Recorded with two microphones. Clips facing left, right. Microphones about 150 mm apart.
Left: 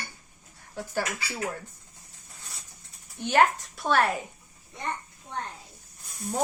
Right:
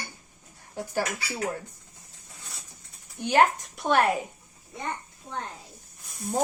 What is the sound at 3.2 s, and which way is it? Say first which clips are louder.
Speech: right 1 dB; 15° right (ahead or behind).